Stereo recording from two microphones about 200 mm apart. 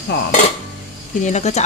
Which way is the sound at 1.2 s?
35° left (ahead or behind).